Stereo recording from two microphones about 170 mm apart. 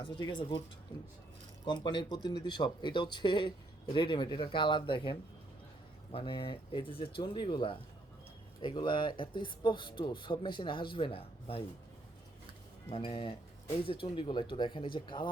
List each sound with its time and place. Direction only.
0.0 s speech: 25° left (ahead or behind)
12.9 s speech: 30° left (ahead or behind)